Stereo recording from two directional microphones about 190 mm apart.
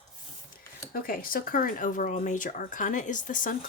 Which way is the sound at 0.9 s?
50° left (ahead or behind).